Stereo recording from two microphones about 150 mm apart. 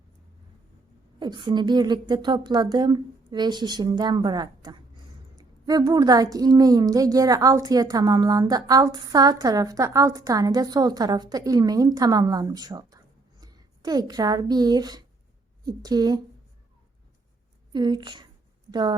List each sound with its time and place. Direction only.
1.2 s a woman's voice: 30° right (ahead or behind)
17.7 s a woman's voice: 30° right (ahead or behind)